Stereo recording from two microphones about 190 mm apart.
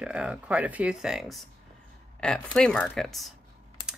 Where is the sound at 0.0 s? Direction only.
5° right (ahead or behind).